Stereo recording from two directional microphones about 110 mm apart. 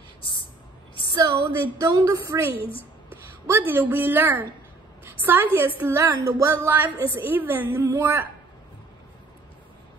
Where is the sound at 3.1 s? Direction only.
20° right (ahead or behind).